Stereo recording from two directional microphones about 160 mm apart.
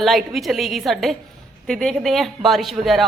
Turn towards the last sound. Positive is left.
turn(degrees=0)  # may be behind; listen again after turning